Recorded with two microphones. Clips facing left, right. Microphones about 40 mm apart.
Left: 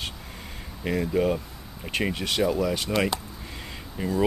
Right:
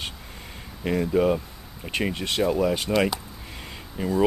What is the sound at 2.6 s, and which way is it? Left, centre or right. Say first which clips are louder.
Speech: right 3 dB; centre.